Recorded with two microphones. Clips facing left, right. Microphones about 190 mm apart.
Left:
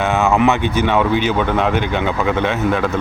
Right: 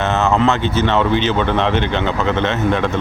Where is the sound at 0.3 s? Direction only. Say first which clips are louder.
Left 1 dB; 15° left (ahead or behind).